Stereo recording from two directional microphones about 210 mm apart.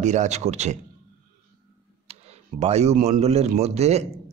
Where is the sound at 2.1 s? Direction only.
30° right (ahead or behind).